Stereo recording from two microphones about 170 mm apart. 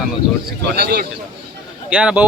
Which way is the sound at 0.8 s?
70° right (ahead or behind).